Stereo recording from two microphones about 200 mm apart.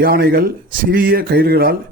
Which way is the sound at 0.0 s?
50° right (ahead or behind).